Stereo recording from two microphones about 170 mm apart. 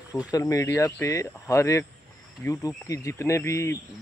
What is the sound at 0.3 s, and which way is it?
Speech, 20° left (ahead or behind).